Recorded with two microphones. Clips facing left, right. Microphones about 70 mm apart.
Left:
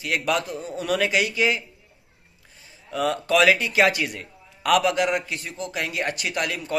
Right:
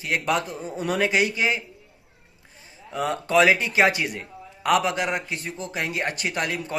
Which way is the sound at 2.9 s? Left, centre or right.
Right.